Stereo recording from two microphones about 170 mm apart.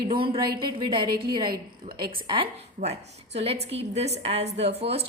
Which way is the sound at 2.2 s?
30° right (ahead or behind).